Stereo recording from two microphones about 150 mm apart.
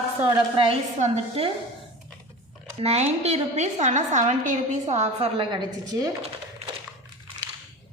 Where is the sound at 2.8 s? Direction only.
45° right (ahead or behind); by 6.1 s 25° right (ahead or behind).